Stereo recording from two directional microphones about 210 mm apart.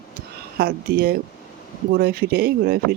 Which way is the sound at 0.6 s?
45° right (ahead or behind).